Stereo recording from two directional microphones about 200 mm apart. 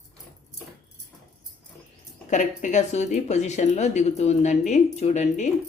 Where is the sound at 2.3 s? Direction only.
40° left (ahead or behind).